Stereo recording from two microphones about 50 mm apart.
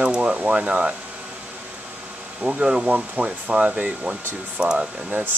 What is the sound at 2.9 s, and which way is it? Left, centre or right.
Speech, right.